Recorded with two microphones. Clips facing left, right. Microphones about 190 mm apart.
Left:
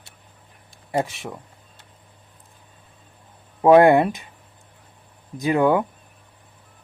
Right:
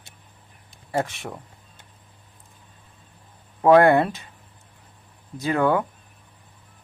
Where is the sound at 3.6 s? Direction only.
20° left (ahead or behind).